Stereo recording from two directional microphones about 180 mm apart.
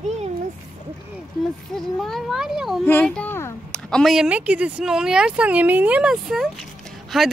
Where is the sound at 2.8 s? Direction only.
10° left (ahead or behind).